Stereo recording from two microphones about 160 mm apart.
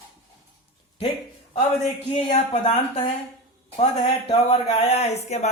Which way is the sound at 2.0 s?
35° left (ahead or behind).